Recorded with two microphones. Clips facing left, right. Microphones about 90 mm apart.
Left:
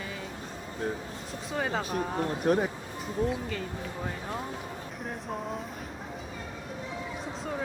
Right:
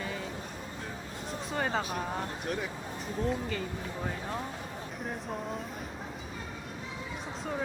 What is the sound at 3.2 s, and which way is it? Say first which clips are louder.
Speech: left 1 dB; centre (ahead or behind).